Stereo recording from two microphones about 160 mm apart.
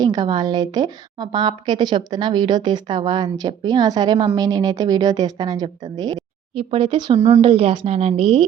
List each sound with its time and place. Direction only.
0.0 s a woman's voice: 25° right (ahead or behind)
6.6 s a woman's voice: 35° right (ahead or behind)
7.2 s a woman's voice: 20° right (ahead or behind)
7.4 s a woman's voice: 35° right (ahead or behind)